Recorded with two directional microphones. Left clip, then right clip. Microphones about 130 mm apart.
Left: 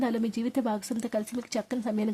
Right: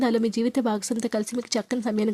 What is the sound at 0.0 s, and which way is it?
Speech, 30° right (ahead or behind).